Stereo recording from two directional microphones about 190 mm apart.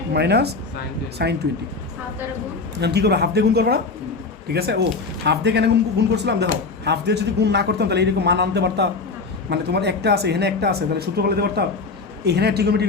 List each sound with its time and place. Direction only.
0.1 s speech: 60° right (ahead or behind)
2.8 s speech: 60° right (ahead or behind)